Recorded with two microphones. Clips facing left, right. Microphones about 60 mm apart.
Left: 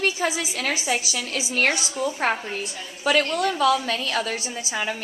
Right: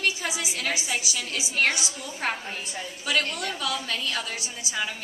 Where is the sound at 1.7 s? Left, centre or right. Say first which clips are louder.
Left 5 dB; left.